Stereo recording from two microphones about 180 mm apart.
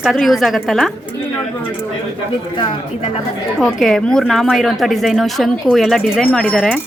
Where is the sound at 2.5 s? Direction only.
25° left (ahead or behind).